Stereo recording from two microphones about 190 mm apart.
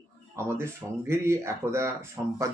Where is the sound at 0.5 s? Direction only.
15° right (ahead or behind).